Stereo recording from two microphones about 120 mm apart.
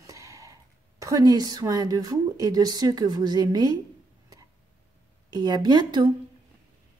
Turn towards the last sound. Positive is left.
turn(degrees=-40)  # may be behind; listen again after turning